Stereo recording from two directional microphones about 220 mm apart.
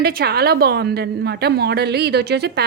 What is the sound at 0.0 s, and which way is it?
A woman's voice, 45° right (ahead or behind).